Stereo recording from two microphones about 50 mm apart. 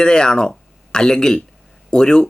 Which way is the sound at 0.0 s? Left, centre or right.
Centre.